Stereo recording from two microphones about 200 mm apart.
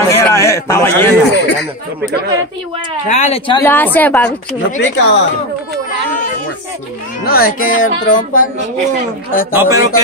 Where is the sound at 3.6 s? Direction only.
10° left (ahead or behind).